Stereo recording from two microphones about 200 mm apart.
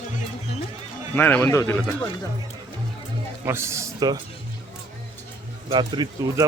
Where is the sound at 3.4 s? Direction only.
15° right (ahead or behind).